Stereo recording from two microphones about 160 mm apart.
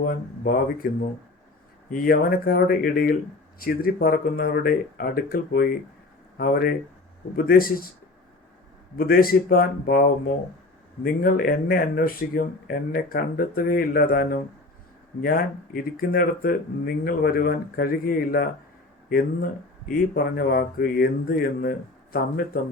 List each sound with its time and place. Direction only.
0.0 s speech: 65° left (ahead or behind)
1.9 s speech: 65° left (ahead or behind)
9.0 s speech: 70° left (ahead or behind)
19.9 s speech: 65° left (ahead or behind)